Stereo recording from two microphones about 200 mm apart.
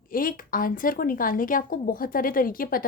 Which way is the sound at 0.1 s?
45° left (ahead or behind).